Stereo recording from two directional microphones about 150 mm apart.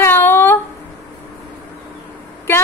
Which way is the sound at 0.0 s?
15° left (ahead or behind).